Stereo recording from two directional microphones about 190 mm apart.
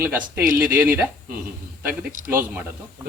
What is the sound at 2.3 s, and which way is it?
Speech, 10° right (ahead or behind).